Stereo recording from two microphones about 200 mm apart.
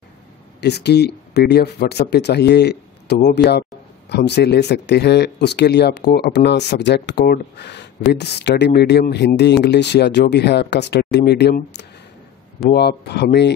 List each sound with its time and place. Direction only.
0.6 s speech: 55° left (ahead or behind)